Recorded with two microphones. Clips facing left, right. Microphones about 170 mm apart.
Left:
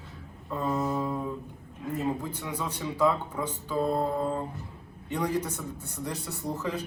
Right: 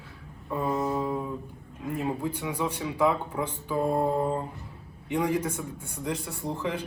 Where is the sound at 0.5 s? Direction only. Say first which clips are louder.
Right 1 dB; 15° right (ahead or behind).